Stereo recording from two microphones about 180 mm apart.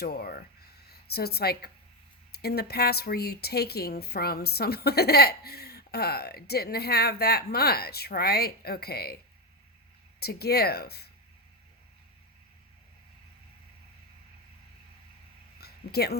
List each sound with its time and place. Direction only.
0.0 s speech: 55° left (ahead or behind)
10.2 s speech: 60° left (ahead or behind)
15.6 s a sound: 60° left (ahead or behind)